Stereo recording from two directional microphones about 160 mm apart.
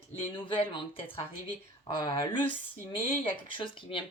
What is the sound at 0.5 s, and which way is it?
Speech, 35° left (ahead or behind).